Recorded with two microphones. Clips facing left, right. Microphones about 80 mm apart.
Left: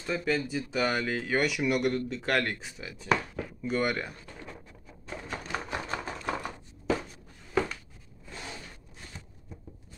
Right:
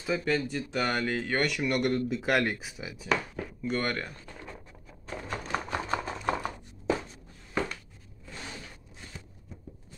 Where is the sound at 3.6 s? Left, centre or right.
Centre.